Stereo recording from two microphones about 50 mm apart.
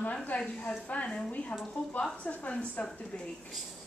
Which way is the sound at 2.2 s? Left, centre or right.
Left.